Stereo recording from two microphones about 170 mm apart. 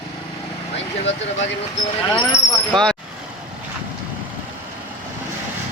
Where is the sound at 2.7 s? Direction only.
5° left (ahead or behind).